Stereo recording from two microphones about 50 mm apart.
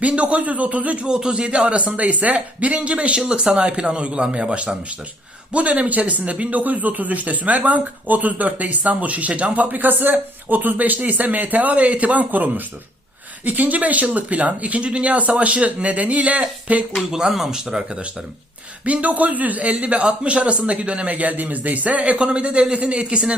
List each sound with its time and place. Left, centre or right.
0.0 s a man's voice: right
1.0 s a man's voice: centre
17.1 s speech: centre
18.9 s a man's voice: right